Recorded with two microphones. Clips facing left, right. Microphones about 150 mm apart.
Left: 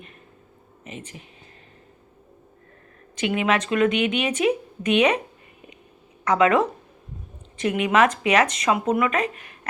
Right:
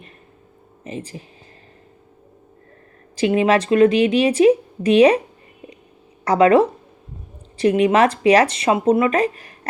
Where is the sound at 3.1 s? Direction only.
35° right (ahead or behind).